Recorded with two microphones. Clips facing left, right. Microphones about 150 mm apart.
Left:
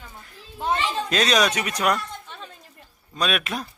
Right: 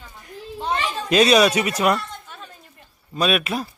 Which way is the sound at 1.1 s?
10° right (ahead or behind).